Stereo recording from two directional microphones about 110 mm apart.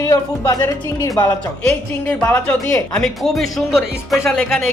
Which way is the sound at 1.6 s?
15° left (ahead or behind).